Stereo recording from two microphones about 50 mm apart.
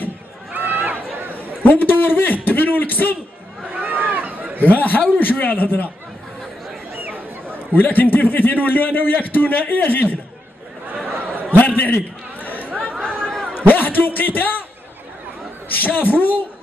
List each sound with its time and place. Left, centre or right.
0.5 s run: right
1.6 s a man's voice: left
3.7 s a sound: right
4.6 s a man's voice: left
7.0 s chatter: right
7.5 s a man's voice: left
11.5 s a man's voice: left
12.6 s chatter: right
12.9 s chatter: centre
13.6 s a man's voice: left
15.7 s a man's voice: left